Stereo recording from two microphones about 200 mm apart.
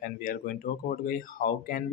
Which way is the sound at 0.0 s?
45° left (ahead or behind).